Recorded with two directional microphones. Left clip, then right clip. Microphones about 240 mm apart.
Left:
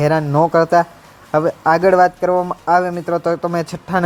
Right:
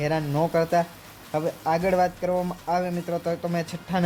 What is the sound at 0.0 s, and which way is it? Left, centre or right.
Speech, left.